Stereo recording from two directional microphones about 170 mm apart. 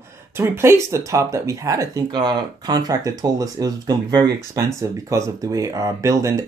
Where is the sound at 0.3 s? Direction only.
15° right (ahead or behind).